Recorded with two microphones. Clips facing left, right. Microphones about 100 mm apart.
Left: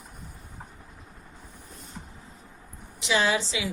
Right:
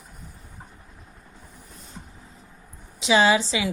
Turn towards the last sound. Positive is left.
turn(degrees=-70)  # may be behind; listen again after turning